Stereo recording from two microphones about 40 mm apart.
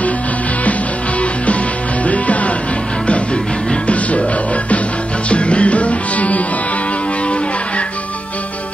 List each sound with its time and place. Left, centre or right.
2.0 s music: left
3.8 s music: left
5.3 s music: left